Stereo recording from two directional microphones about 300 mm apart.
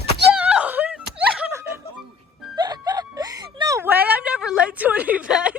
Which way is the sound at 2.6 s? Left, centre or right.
Centre.